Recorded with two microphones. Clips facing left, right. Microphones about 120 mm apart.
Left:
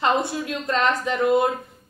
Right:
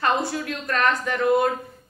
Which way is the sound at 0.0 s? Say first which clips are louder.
Left 1 dB; 25° left (ahead or behind).